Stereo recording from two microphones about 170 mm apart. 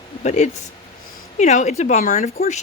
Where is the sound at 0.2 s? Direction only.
40° left (ahead or behind).